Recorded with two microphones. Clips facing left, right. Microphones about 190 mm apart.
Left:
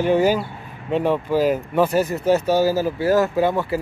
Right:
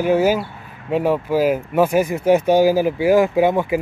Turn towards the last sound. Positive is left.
turn(degrees=-15)  # may be behind; listen again after turning